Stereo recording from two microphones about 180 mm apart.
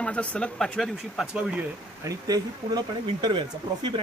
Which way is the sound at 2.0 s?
20° right (ahead or behind).